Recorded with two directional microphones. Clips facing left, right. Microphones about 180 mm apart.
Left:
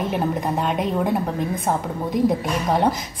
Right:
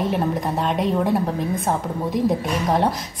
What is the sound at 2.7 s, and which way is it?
Speech, centre (ahead or behind).